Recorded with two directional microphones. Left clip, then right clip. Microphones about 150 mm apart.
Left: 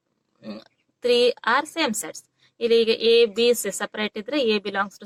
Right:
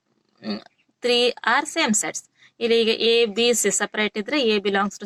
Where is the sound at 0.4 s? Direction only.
20° right (ahead or behind).